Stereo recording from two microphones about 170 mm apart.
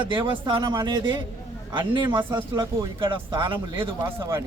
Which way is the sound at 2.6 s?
30° right (ahead or behind).